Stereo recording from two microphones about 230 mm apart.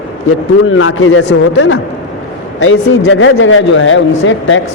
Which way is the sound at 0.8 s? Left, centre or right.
Left.